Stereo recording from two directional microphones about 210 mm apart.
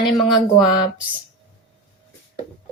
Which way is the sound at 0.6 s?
20° left (ahead or behind).